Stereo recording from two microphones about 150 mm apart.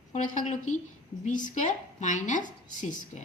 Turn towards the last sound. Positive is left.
turn(degrees=55)  # may be behind; listen again after turning